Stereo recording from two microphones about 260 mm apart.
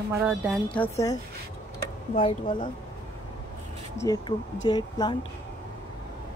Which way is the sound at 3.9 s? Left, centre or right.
Centre.